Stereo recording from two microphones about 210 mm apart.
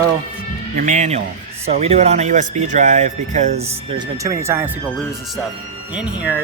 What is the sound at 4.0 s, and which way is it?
Speech, 15° right (ahead or behind).